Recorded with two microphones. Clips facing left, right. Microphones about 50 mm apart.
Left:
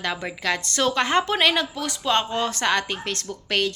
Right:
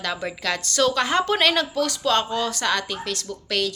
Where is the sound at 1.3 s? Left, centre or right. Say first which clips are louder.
Right 1 dB; centre.